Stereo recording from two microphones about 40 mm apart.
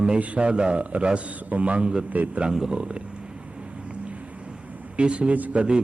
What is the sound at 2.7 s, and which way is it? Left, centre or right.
Wild animals, right.